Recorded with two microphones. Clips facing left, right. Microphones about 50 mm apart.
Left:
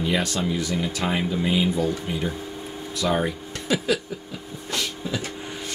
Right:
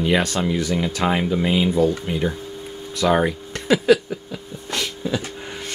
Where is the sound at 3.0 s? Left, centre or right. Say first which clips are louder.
Right 6 dB; right.